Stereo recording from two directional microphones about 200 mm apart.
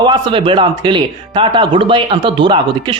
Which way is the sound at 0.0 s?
25° right (ahead or behind).